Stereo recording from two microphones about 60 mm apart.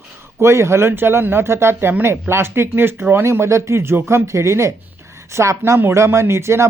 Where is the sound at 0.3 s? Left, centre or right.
Right.